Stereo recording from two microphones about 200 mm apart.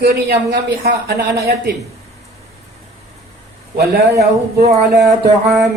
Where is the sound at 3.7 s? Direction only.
50° right (ahead or behind).